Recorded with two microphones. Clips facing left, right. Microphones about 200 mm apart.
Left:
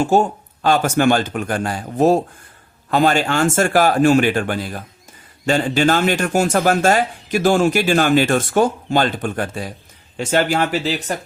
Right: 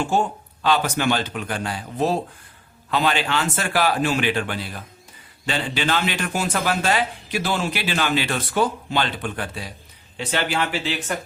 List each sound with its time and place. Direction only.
0.0 s speech: 45° left (ahead or behind)